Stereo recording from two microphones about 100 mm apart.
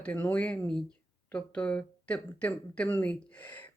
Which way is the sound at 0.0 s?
15° left (ahead or behind).